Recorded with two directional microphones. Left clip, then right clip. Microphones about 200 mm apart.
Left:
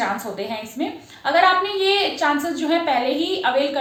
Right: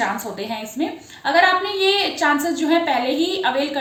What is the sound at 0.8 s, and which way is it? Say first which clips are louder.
A woman's voice: right 2 dB; 15° right (ahead or behind).